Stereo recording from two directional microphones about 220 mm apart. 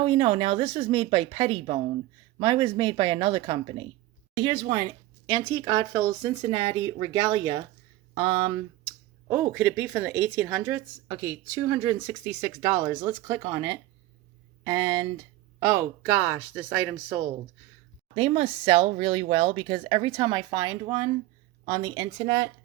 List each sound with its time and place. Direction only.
0.0 s speech: 25° right (ahead or behind)
18.1 s speech: 25° right (ahead or behind)